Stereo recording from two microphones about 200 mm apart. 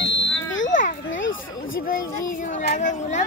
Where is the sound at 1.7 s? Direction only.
45° left (ahead or behind).